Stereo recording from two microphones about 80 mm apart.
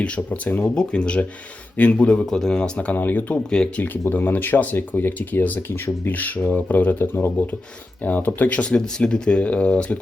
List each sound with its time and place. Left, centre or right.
0.0 s speech: centre
3.6 s speech: centre
4.1 s speech: left